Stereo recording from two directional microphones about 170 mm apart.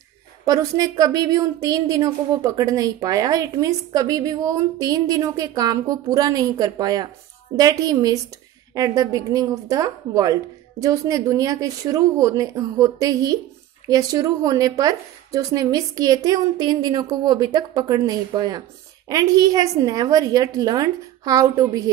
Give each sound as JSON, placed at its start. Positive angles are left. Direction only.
{"t": 0.5, "sound": "a woman's voice", "side_deg": -20}